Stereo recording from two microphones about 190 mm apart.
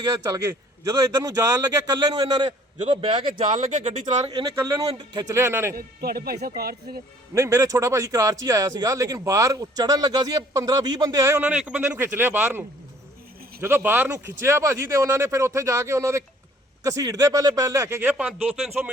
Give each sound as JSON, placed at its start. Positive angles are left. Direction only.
{"t": 0.0, "sound": "a man's voice", "side_deg": -15}
{"t": 3.5, "sound": "speech", "side_deg": -40}
{"t": 4.3, "sound": "a man's voice", "side_deg": -20}
{"t": 5.7, "sound": "speech", "side_deg": -55}
{"t": 7.3, "sound": "a man's voice", "side_deg": -15}